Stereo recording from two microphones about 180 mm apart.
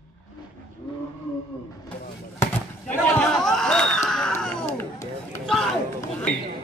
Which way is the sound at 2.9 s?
5° left (ahead or behind).